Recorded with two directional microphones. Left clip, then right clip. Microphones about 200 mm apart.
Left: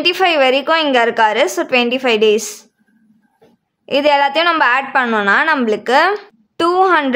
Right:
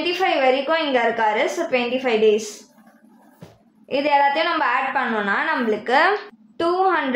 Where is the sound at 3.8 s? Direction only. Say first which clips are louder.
Left 5 dB; 35° left (ahead or behind).